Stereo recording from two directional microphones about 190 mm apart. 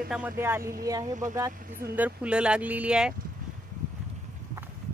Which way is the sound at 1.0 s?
40° right (ahead or behind).